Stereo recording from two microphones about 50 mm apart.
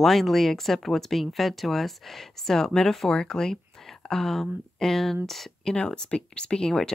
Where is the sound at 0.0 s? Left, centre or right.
Centre.